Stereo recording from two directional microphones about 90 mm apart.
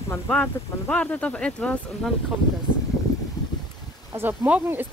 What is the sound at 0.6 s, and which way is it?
Speech, 30° left (ahead or behind).